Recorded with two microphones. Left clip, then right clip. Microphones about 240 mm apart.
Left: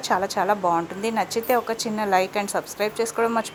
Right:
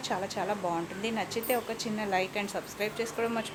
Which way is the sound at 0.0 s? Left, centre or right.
Centre.